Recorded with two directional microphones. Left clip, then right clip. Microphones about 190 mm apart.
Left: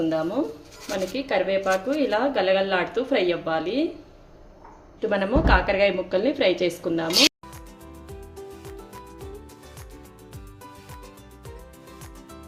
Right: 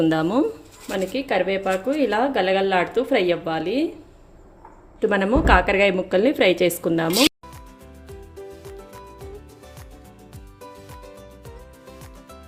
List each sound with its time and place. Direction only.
0.0 s speech: 50° right (ahead or behind)
0.9 s speech: 30° right (ahead or behind)
4.9 s a woman's voice: 35° right (ahead or behind)
8.0 s music: centre (ahead or behind)
10.6 s music: centre (ahead or behind)